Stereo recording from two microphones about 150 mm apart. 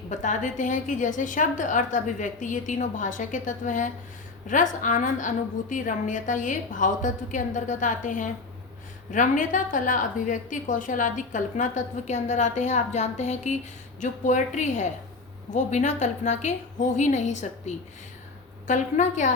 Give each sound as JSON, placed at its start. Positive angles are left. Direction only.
{"t": 0.1, "sound": "a woman's voice", "side_deg": 55}
{"t": 18.7, "sound": "a woman's voice", "side_deg": 55}